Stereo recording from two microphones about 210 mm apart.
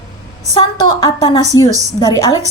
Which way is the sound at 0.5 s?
20° left (ahead or behind).